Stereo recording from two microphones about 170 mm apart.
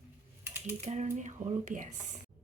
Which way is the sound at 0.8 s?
40° right (ahead or behind).